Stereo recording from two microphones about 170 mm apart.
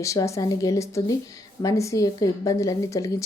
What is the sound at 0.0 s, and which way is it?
A woman's voice, 20° left (ahead or behind).